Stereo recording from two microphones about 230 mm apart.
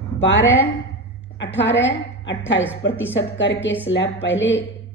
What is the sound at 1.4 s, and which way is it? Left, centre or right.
A woman's voice, left.